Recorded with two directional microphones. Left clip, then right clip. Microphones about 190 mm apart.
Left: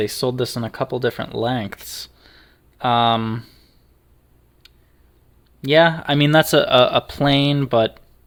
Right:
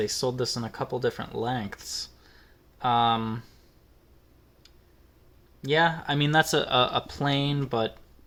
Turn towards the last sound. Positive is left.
turn(degrees=50)  # may be behind; listen again after turning